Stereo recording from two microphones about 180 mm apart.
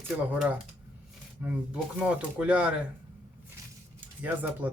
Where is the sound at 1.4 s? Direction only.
5° right (ahead or behind).